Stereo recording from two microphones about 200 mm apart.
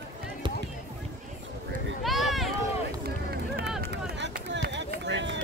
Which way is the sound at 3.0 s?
50° right (ahead or behind).